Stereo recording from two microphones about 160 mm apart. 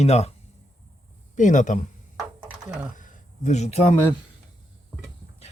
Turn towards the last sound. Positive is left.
turn(degrees=45)  # may be behind; listen again after turning